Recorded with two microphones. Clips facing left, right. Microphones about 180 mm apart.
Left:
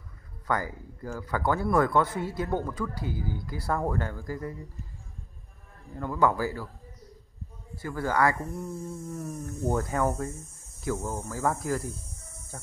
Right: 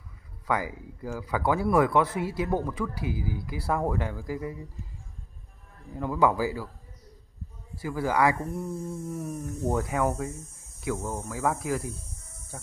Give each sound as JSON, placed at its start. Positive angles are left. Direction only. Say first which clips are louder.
{"t": 0.5, "sound": "speech", "louder": "right 1 dB", "side_deg": -5}
{"t": 3.0, "sound": "speech", "louder": "right 2 dB", "side_deg": -90}
{"t": 3.3, "sound": "speech", "louder": "right 1 dB", "side_deg": -10}
{"t": 5.9, "sound": "speech", "louder": "right 1 dB", "side_deg": -10}
{"t": 7.8, "sound": "speech", "louder": "right 1 dB", "side_deg": -10}
{"t": 10.8, "sound": "cricket", "louder": "even", "side_deg": -5}
{"t": 11.2, "sound": "speech", "louder": "even", "side_deg": -5}